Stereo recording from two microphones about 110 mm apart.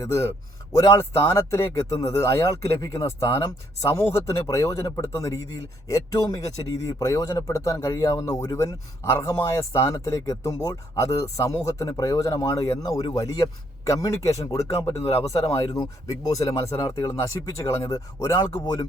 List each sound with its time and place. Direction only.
0.0 s speech: 25° left (ahead or behind)